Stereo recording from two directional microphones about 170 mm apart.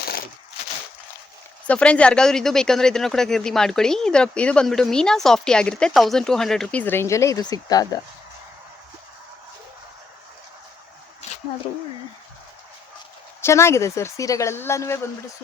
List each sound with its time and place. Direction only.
1.6 s speech: 5° left (ahead or behind); by 7.9 s 20° left (ahead or behind)
11.2 s a sound: 40° left (ahead or behind)
13.4 s a woman's voice: 15° left (ahead or behind)